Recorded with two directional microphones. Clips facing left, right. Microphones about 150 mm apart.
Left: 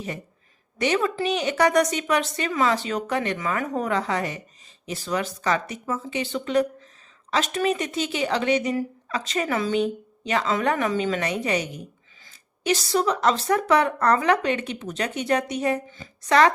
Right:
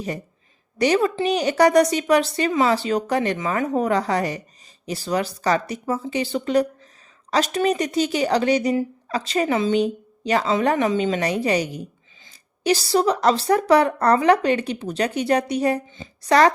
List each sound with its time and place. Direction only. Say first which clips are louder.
0.8 s speech: right 4 dB; 35° right (ahead or behind)
10.2 s speech: right 4 dB; 35° right (ahead or behind)
15.9 s a woman's voice: right 3 dB; 25° right (ahead or behind)
16.3 s speech: right 2 dB; 35° right (ahead or behind)